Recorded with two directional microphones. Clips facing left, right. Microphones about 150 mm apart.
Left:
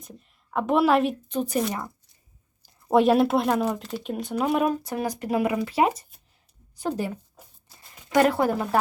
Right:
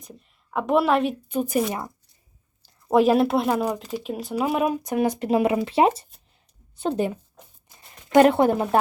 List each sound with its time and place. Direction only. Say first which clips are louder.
0.0 s a woman's voice: even; centre (ahead or behind)
2.9 s speech: right 1 dB; centre (ahead or behind)
4.8 s speech: right 6 dB; 20° right (ahead or behind)
8.1 s speech: right 5 dB; 25° right (ahead or behind)